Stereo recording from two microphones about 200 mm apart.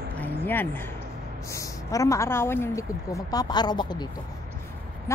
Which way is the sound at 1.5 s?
15° left (ahead or behind).